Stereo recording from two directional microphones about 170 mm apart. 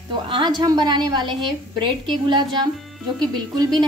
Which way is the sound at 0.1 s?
25° right (ahead or behind).